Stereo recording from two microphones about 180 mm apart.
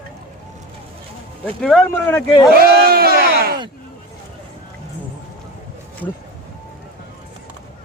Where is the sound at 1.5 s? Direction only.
5° left (ahead or behind).